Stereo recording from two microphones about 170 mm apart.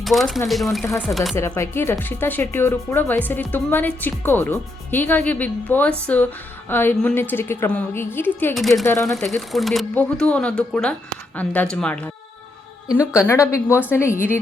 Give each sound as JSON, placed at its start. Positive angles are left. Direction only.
{"t": 0.0, "sound": "speech", "side_deg": 0}
{"t": 0.8, "sound": "speech", "side_deg": 10}
{"t": 1.4, "sound": "speech", "side_deg": 15}
{"t": 8.5, "sound": "speech", "side_deg": 0}
{"t": 8.9, "sound": "speech", "side_deg": 15}
{"t": 9.5, "sound": "speech", "side_deg": 0}
{"t": 13.1, "sound": "speech", "side_deg": 15}